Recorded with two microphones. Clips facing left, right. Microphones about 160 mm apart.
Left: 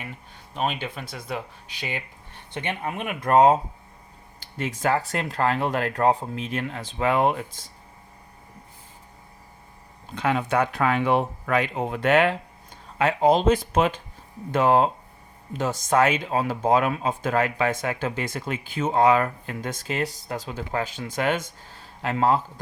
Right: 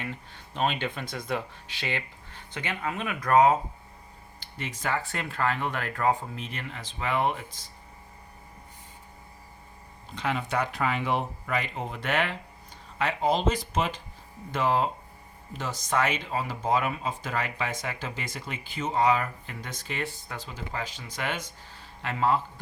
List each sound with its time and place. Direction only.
0.0 s speech: 10° left (ahead or behind); by 3.6 s 35° left (ahead or behind)
4.8 s speech: 40° left (ahead or behind)
10.2 s speech: 55° left (ahead or behind)